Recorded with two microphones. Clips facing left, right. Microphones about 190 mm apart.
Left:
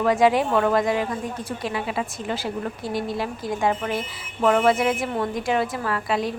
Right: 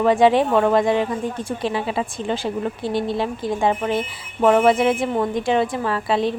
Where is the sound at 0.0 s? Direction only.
25° right (ahead or behind).